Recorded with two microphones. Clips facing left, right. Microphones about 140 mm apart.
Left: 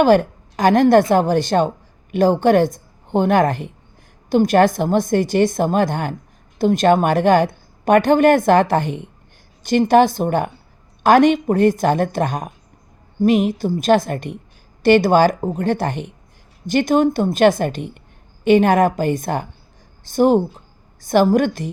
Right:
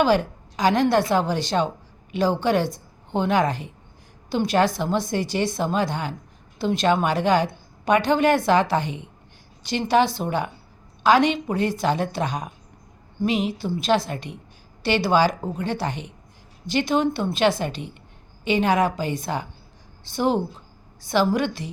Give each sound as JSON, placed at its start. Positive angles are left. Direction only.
{"t": 0.0, "sound": "a woman's voice", "side_deg": 50}